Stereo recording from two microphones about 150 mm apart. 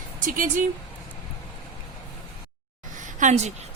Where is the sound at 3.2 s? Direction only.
50° right (ahead or behind).